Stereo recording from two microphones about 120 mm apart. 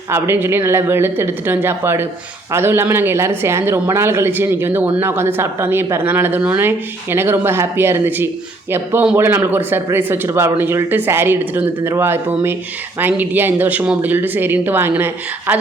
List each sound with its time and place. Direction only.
0.1 s a man's voice: 20° right (ahead or behind)